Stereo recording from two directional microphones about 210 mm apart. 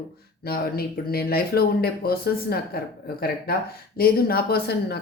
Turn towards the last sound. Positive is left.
turn(degrees=50)  # may be behind; listen again after turning